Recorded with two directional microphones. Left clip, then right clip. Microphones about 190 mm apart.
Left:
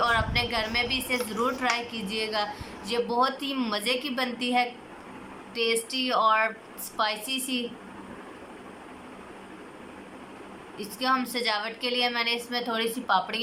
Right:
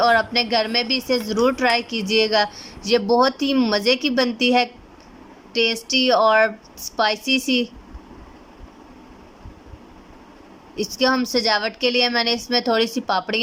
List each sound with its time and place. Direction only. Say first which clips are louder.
0.0 s a woman's voice: right 8 dB; 55° right (ahead or behind)
10.9 s a woman's voice: right 7 dB; 55° right (ahead or behind)